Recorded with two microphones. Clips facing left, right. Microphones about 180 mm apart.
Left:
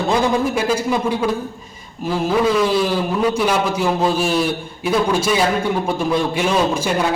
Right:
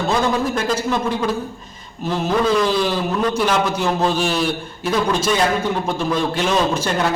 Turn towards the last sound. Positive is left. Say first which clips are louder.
# left 1 dB
turn(degrees=10)  # may be behind; listen again after turning